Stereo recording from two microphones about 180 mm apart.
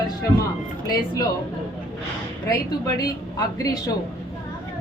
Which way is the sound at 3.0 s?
20° left (ahead or behind).